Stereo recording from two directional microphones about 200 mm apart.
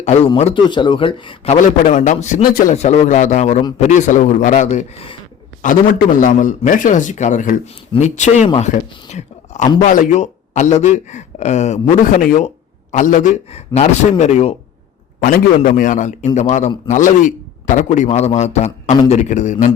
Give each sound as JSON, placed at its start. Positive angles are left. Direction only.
{"t": 0.3, "sound": "a man's voice", "side_deg": 30}
{"t": 1.8, "sound": "a man's voice", "side_deg": 40}
{"t": 2.7, "sound": "a man's voice", "side_deg": 35}
{"t": 15.6, "sound": "a man's voice", "side_deg": 40}